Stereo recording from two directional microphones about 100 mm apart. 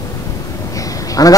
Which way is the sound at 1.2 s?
35° left (ahead or behind).